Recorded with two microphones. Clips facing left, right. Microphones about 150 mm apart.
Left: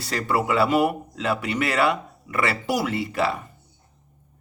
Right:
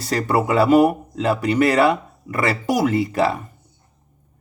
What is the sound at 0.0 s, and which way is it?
Speech, 40° right (ahead or behind).